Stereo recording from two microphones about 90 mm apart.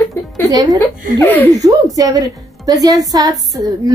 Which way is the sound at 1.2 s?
20° left (ahead or behind).